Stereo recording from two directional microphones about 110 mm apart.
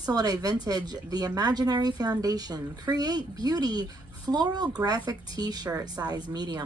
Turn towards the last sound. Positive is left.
turn(degrees=-40)  # may be behind; listen again after turning